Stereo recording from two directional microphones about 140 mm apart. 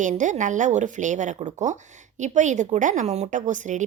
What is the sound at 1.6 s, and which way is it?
A woman's voice, 60° right (ahead or behind).